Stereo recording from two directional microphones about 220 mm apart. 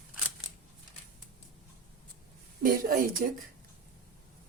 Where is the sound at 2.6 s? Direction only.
40° right (ahead or behind).